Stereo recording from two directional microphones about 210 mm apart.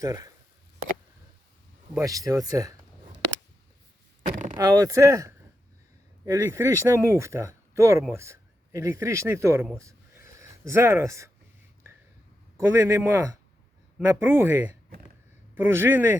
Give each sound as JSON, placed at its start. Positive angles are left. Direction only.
{"t": 1.9, "sound": "speech", "side_deg": -15}
{"t": 4.5, "sound": "a man's voice", "side_deg": -15}
{"t": 9.7, "sound": "a sound", "side_deg": -15}
{"t": 12.5, "sound": "speech", "side_deg": -15}